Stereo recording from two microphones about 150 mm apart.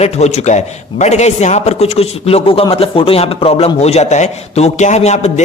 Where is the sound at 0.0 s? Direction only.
45° left (ahead or behind).